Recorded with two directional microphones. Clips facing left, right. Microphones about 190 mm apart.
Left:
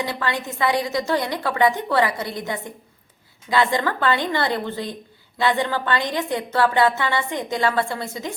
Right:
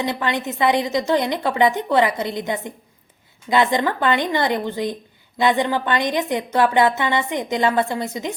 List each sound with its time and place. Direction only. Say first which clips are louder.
0.0 s a woman's voice: right 3 dB; 20° right (ahead or behind)